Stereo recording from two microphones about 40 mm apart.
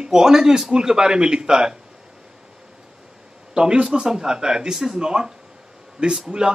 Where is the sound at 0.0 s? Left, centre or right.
Centre.